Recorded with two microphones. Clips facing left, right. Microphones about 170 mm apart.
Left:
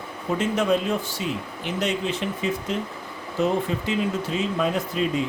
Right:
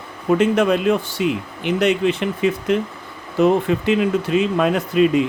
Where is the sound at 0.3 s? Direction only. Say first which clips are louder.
Right 6 dB; 70° right (ahead or behind).